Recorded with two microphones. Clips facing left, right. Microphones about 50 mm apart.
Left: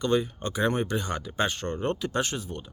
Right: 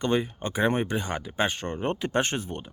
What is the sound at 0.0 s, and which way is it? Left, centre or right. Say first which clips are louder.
Speech: even; right.